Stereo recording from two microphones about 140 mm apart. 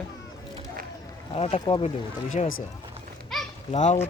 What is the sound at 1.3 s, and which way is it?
Speech, 45° left (ahead or behind).